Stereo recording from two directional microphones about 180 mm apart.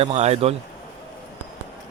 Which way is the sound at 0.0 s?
35° right (ahead or behind).